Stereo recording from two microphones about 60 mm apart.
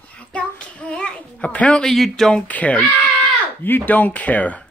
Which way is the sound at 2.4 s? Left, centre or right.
Left.